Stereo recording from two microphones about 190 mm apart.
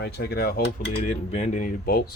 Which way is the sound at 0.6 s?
35° left (ahead or behind).